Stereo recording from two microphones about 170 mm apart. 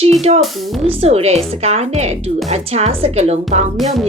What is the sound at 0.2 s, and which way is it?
Speech, 40° right (ahead or behind).